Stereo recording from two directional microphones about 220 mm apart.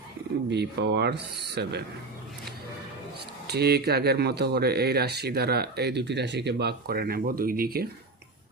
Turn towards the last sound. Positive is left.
turn(degrees=-45)  # may be behind; listen again after turning